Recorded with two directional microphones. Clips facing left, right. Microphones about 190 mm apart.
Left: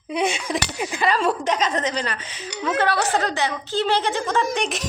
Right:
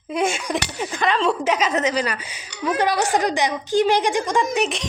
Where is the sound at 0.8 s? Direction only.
10° left (ahead or behind).